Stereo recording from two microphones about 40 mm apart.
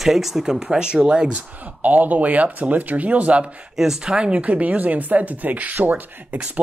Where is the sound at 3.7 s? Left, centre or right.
Centre.